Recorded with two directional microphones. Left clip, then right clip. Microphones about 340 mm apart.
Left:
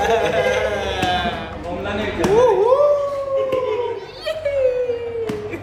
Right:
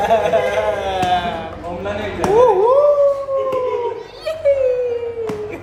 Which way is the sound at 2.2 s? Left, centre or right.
Right.